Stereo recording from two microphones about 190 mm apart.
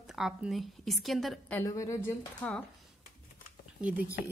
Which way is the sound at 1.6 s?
15° left (ahead or behind).